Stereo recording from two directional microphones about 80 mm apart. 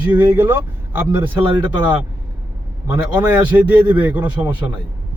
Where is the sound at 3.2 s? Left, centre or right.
Centre.